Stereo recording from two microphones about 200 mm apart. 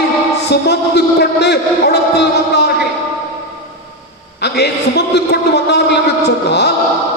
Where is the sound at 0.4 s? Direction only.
55° left (ahead or behind).